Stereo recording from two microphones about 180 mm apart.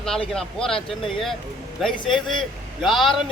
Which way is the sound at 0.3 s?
Centre (ahead or behind).